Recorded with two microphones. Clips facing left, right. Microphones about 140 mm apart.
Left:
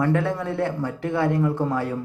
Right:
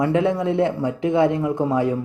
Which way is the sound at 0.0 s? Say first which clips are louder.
Right 4 dB; 20° right (ahead or behind).